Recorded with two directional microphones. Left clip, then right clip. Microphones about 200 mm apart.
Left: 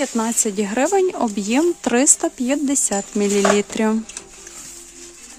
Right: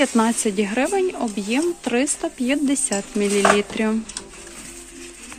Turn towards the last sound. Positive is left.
turn(degrees=40)  # may be behind; listen again after turning